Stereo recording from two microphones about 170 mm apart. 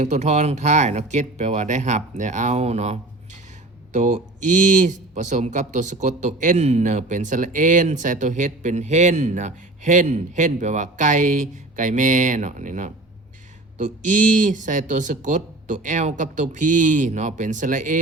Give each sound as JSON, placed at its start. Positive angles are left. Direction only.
{"t": 0.0, "sound": "speech", "side_deg": -40}
{"t": 14.0, "sound": "speech", "side_deg": -50}